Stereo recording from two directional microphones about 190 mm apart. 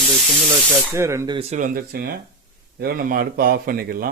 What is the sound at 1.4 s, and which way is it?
Speech, 40° right (ahead or behind).